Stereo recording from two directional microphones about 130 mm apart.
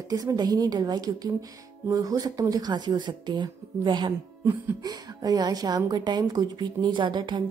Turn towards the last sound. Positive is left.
turn(degrees=-35)  # may be behind; listen again after turning